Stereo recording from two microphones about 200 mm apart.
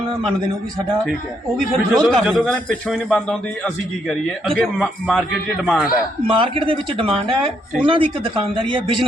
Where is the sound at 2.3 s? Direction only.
5° left (ahead or behind).